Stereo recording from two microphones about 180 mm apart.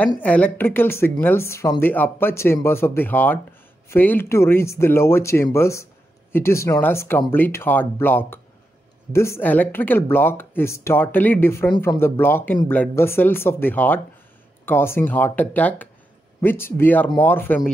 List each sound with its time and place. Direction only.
0.2 s speech: 10° left (ahead or behind)